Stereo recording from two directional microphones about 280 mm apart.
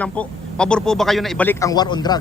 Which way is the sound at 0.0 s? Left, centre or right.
Centre.